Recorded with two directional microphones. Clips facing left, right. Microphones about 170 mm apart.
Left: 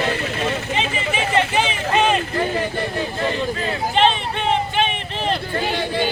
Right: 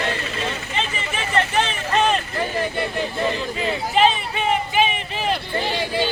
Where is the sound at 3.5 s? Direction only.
5° right (ahead or behind).